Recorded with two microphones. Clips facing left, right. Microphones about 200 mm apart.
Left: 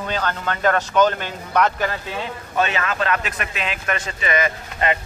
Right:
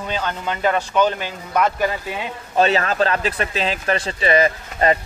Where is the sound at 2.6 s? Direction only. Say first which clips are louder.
Right 5 dB; 35° right (ahead or behind).